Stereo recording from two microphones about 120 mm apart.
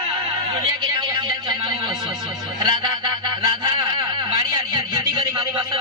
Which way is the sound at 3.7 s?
40° right (ahead or behind).